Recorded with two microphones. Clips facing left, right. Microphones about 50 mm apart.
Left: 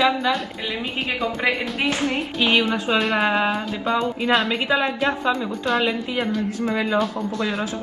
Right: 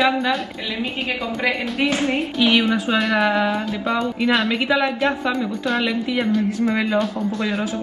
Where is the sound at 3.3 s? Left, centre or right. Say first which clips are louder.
Right 1 dB; left.